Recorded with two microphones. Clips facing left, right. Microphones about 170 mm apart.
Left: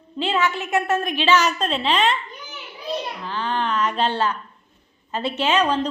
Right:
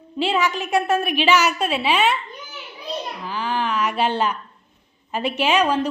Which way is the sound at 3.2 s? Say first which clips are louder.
Right 1 dB; 10° right (ahead or behind).